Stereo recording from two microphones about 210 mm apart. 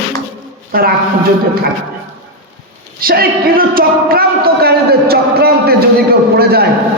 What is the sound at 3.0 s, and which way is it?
Speech, 45° right (ahead or behind).